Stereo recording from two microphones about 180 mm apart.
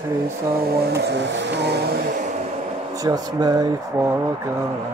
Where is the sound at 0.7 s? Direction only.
65° right (ahead or behind).